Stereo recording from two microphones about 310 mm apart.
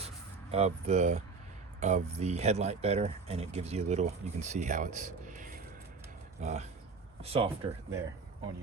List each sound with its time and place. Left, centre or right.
0.5 s speech: right